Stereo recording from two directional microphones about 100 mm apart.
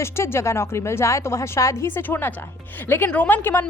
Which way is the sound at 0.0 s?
25° left (ahead or behind).